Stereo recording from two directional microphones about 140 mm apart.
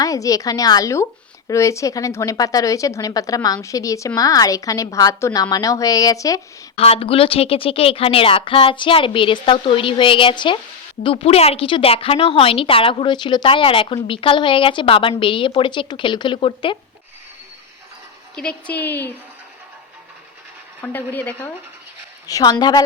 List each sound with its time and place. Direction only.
0.0 s a woman's voice: 25° left (ahead or behind)
6.7 s a woman's voice: 45° left (ahead or behind)
18.7 s a woman's voice: 15° left (ahead or behind)
20.8 s a woman's voice: 15° left (ahead or behind)
22.3 s a woman's voice: 25° left (ahead or behind)